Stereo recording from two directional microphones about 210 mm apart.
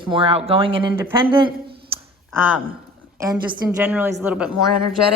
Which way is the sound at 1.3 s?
25° right (ahead or behind).